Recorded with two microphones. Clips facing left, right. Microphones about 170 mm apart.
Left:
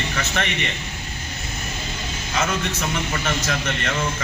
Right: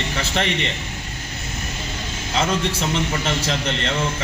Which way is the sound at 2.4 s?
25° right (ahead or behind).